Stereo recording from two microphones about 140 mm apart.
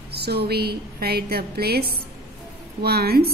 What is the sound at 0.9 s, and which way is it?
A woman's voice, 90° right.